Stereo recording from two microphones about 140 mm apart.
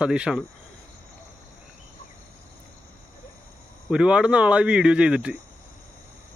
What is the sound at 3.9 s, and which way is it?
Speech, 5° right (ahead or behind).